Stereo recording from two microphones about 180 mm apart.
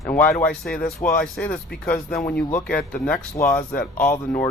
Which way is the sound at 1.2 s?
5° left (ahead or behind).